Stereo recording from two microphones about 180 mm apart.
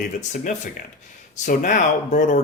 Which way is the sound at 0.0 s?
45° left (ahead or behind).